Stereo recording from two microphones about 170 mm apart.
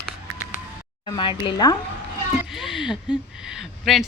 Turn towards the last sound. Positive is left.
turn(degrees=0)  # may be behind; listen again after turning